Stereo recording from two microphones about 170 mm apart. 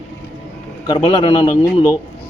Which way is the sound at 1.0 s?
35° left (ahead or behind).